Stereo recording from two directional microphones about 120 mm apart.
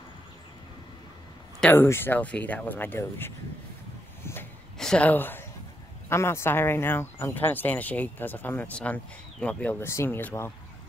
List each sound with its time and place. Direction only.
1.6 s speech: 15° left (ahead or behind)
4.2 s a sound: 20° left (ahead or behind)
4.7 s speech: 5° left (ahead or behind)